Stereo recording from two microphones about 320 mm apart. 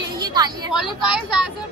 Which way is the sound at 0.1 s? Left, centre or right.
Centre.